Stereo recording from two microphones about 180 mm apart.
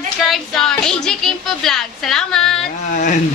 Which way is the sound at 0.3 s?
5° left (ahead or behind).